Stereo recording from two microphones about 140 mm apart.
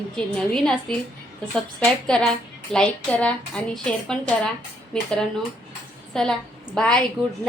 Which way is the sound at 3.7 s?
5° left (ahead or behind).